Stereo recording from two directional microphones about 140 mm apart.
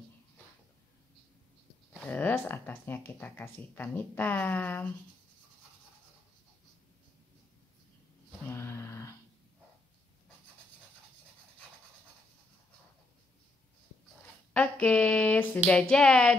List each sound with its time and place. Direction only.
2.0 s speech: 10° left (ahead or behind)
8.5 s a sound: 20° left (ahead or behind)
14.5 s speech: 10° left (ahead or behind)